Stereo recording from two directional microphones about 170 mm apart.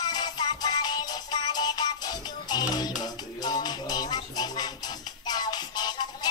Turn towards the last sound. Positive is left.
turn(degrees=25)  # may be behind; listen again after turning